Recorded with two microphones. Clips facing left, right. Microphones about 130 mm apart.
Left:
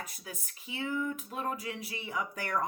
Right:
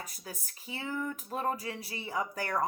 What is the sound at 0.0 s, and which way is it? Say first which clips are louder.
Speech: even; 35° right (ahead or behind).